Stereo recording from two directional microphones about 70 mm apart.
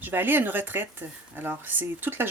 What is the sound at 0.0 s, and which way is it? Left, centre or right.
Speech, right.